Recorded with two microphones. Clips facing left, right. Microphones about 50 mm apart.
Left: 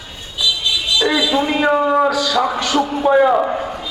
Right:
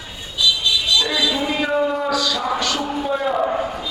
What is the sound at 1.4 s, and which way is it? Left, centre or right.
Speech, left.